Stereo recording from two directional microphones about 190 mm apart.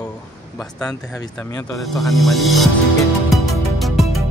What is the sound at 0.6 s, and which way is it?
Speech, 5° left (ahead or behind).